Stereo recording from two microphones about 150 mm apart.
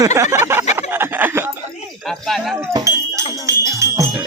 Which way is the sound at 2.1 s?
Centre (ahead or behind).